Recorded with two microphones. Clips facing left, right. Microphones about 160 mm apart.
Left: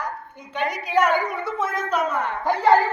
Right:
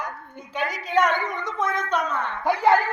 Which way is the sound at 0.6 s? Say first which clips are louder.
Left 1 dB; centre (ahead or behind).